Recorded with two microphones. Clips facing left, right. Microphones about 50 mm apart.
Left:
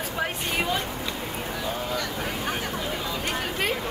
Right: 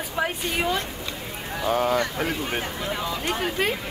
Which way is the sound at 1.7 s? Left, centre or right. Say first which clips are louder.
Right 11 dB; right.